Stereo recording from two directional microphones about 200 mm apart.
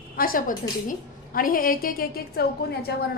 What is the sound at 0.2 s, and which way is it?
A woman's voice, 45° left (ahead or behind).